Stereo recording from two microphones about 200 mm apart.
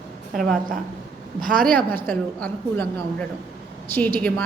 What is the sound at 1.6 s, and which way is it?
A woman's voice, 5° left (ahead or behind).